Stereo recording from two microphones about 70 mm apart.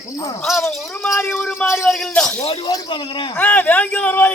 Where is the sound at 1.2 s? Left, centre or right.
Left.